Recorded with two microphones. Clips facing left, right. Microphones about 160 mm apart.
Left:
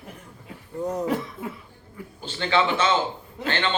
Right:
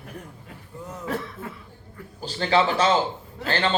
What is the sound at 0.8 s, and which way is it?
Chuckle, 40° left (ahead or behind).